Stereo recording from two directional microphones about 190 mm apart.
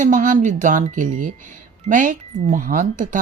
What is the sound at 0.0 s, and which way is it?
Speech, 45° right (ahead or behind).